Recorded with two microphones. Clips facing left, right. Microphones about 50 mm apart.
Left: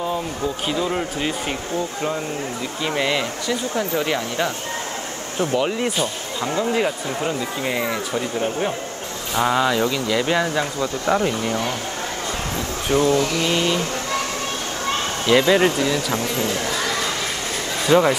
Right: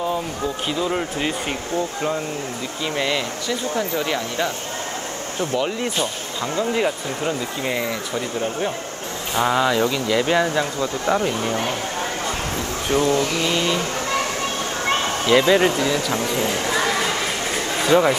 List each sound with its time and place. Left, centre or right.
0.7 s speech: centre
2.8 s speech: centre
5.6 s speech: centre
13.0 s speech: right
15.2 s speech: centre
16.3 s a sound: right
17.8 s speech: centre